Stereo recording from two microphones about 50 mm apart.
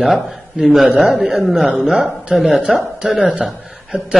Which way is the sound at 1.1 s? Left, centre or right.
Centre.